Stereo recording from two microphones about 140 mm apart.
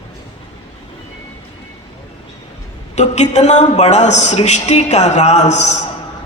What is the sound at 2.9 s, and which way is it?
A man's voice, 55° left (ahead or behind).